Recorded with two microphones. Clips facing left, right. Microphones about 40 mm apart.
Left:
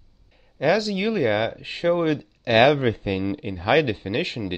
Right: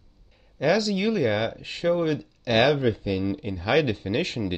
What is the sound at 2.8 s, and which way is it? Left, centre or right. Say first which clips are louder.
Speech: left 1 dB; left.